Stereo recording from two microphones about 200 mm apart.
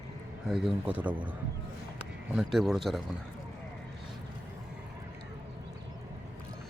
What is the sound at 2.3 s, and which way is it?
Speech, centre (ahead or behind).